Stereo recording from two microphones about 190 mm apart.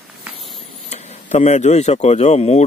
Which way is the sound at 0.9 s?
35° left (ahead or behind).